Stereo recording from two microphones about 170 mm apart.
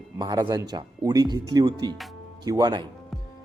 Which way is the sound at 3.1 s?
Centre (ahead or behind).